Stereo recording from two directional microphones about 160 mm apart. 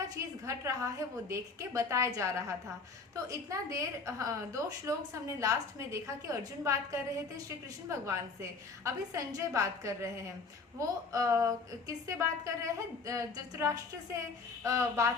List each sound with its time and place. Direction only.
0.4 s a woman's voice: 20° right (ahead or behind)